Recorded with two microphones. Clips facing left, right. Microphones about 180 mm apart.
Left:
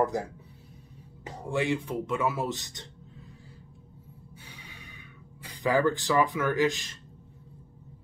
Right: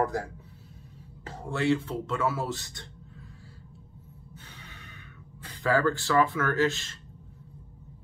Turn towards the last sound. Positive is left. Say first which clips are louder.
# even
turn(degrees=15)  # may be behind; listen again after turning